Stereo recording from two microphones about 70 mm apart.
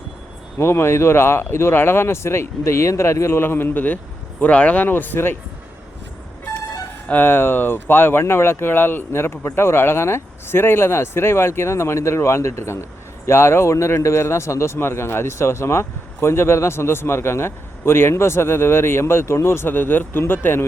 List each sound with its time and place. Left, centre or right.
0.6 s speech: left
7.1 s speech: left